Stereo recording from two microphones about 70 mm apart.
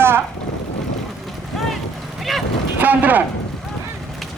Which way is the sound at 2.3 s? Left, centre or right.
Centre.